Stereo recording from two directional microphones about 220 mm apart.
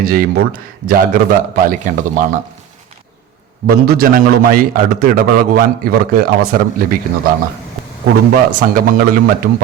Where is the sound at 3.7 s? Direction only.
40° right (ahead or behind).